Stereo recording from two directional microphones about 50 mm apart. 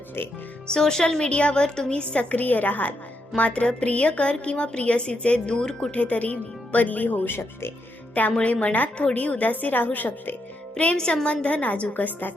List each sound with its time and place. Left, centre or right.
0.7 s a woman's voice: centre
1.9 s a woman's voice: left
6.0 s speech: left
8.4 s a woman's voice: left
10.9 s a woman's voice: centre; by 12.3 s left